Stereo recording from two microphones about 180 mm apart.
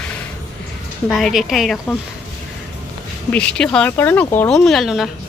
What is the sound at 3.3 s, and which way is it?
Speech, 5° left (ahead or behind).